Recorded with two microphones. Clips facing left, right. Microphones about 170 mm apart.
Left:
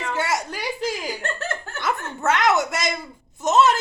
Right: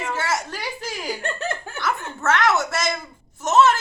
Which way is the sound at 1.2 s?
15° right (ahead or behind).